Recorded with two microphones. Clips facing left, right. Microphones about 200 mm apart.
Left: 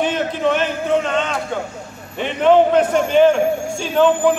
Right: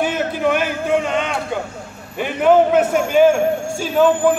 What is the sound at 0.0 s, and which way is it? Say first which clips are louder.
A man's voice: even; 10° right (ahead or behind).